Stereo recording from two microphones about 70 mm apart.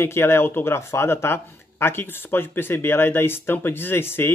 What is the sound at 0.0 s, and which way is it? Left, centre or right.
Speech, left.